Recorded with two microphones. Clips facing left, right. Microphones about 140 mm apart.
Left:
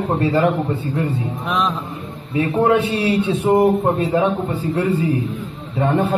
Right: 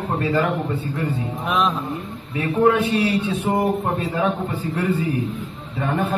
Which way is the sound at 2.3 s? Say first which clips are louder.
Left 2 dB; 35° left (ahead or behind).